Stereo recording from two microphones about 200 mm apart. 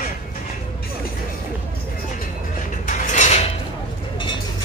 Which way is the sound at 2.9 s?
35° left (ahead or behind).